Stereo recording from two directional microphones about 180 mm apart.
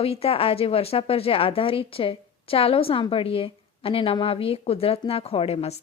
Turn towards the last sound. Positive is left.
turn(degrees=35)  # may be behind; listen again after turning